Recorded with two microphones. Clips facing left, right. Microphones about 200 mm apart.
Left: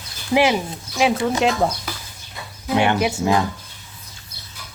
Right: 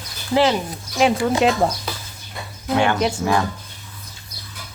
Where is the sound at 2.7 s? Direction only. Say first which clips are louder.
Left 1 dB; 20° left (ahead or behind).